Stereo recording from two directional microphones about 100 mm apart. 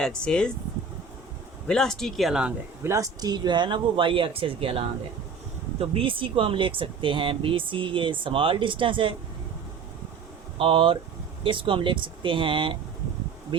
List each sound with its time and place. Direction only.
0.0 s speech: 10° left (ahead or behind)
1.6 s speech: 5° left (ahead or behind)
2.8 s speech: 30° right (ahead or behind); by 9.1 s 55° right (ahead or behind)
10.6 s speech: 65° right (ahead or behind)
13.5 s bee: 60° right (ahead or behind)